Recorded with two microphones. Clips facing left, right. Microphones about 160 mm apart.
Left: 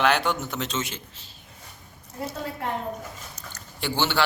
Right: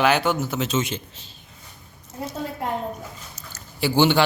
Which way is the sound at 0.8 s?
20° right (ahead or behind).